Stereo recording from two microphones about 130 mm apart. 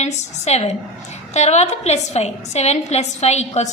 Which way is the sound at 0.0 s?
55° left (ahead or behind).